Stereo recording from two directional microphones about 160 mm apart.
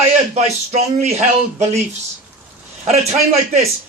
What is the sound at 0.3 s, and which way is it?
Speech, 45° right (ahead or behind).